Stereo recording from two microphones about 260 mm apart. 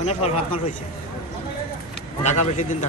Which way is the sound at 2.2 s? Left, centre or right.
Left.